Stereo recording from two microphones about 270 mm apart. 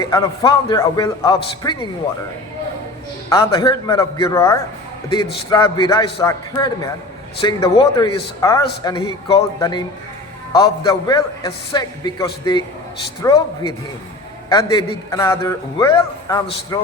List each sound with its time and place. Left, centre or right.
0.0 s speech: centre
3.2 s speech: centre
10.8 s speech: centre